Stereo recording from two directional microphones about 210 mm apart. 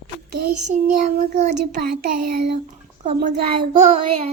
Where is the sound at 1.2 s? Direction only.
35° right (ahead or behind).